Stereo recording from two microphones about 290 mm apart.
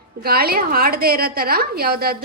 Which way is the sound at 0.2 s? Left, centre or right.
Right.